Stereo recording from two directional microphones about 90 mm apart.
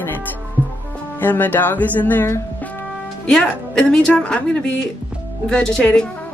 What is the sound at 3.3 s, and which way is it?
A woman's voice, 5° left (ahead or behind).